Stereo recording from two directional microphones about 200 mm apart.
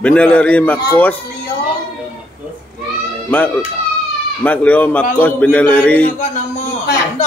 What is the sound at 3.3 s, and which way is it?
A man's voice, 10° left (ahead or behind).